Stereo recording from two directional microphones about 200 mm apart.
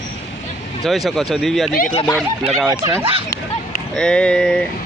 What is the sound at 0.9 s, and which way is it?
Speech, centre (ahead or behind).